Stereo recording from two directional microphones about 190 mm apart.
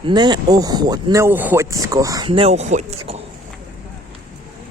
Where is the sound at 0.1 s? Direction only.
20° right (ahead or behind).